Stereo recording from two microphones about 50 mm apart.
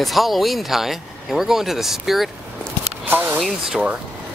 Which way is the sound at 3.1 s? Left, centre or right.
Right.